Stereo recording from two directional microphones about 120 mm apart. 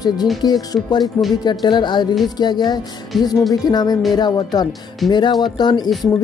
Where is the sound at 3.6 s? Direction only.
35° left (ahead or behind).